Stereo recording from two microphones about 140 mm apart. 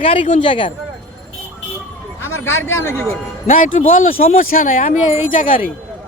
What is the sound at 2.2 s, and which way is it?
Speech, 15° left (ahead or behind).